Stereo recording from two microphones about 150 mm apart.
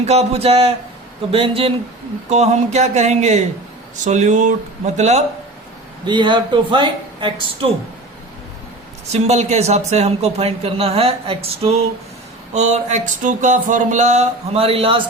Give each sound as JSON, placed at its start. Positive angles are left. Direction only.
{"t": 0.0, "sound": "a man's voice", "side_deg": -45}
{"t": 2.3, "sound": "a man's voice", "side_deg": -50}
{"t": 6.1, "sound": "speech", "side_deg": -30}
{"t": 9.1, "sound": "a man's voice", "side_deg": -45}